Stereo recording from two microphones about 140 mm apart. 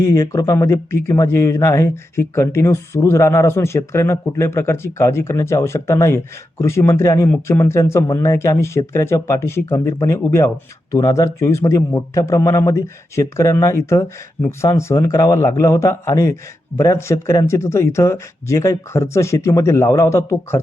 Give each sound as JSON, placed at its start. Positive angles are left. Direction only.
{"t": 0.0, "sound": "a man's voice", "side_deg": 20}